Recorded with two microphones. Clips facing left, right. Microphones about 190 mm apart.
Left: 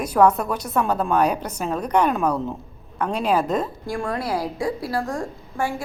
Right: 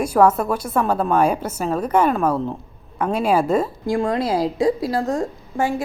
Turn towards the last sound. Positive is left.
turn(degrees=-20)  # may be behind; listen again after turning